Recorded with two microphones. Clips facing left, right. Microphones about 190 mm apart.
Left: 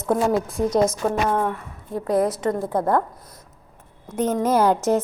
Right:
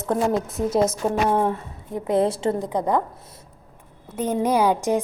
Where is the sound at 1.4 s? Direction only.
25° right (ahead or behind).